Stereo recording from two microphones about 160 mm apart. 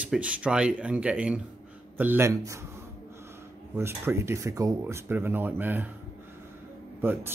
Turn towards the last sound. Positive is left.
turn(degrees=-15)  # may be behind; listen again after turning